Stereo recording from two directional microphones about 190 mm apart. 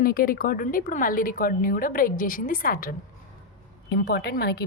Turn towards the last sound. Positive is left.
turn(degrees=55)  # may be behind; listen again after turning